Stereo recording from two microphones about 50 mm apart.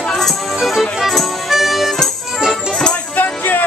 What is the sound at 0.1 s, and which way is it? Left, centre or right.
Music, centre.